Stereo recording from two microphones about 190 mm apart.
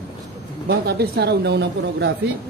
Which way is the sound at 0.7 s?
55° right (ahead or behind).